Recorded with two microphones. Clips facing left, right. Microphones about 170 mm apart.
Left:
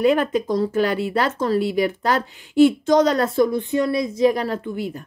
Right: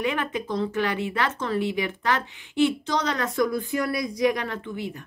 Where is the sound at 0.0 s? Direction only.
35° left (ahead or behind).